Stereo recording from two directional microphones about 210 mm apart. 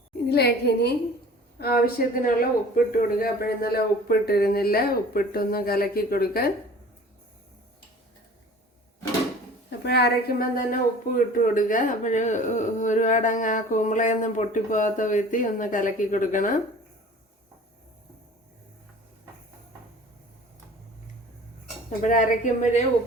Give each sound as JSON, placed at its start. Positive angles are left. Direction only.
{"t": 0.3, "sound": "speech", "side_deg": 50}
{"t": 9.6, "sound": "a woman's voice", "side_deg": 50}
{"t": 21.8, "sound": "a woman's voice", "side_deg": 35}